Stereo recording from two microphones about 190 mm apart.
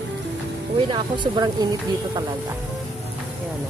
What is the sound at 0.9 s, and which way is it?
Speech, 25° right (ahead or behind).